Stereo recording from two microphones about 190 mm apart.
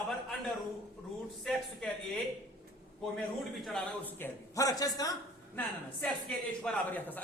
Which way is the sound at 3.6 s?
5° left (ahead or behind).